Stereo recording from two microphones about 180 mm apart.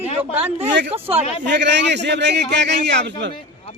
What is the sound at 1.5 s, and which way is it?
A man's voice, 75° right (ahead or behind).